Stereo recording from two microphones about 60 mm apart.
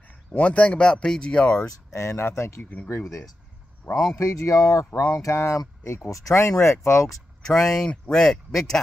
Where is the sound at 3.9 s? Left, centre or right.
Left.